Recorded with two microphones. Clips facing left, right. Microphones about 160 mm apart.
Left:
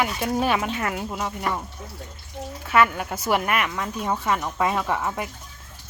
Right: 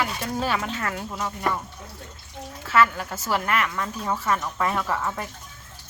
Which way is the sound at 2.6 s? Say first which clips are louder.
Left 1 dB; 15° left (ahead or behind).